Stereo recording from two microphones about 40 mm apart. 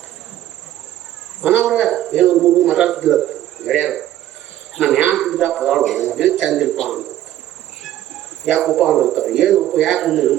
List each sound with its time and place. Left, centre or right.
1.6 s speech: centre
2.4 s a man's voice: centre
7.9 s insect: centre
8.9 s speech: centre
9.6 s a man's voice: centre